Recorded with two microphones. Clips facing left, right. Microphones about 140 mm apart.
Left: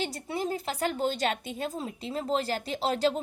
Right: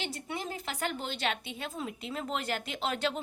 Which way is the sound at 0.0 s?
35° left (ahead or behind).